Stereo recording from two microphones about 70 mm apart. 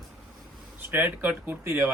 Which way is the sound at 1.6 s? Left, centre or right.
Right.